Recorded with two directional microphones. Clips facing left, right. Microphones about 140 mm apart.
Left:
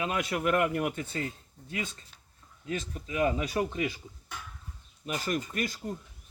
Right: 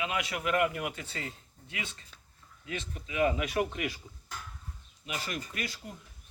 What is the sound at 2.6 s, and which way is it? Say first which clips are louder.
Speech: left 4 dB; 40° left (ahead or behind).